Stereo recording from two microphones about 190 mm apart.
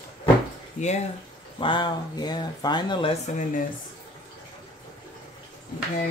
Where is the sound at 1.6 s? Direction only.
25° left (ahead or behind).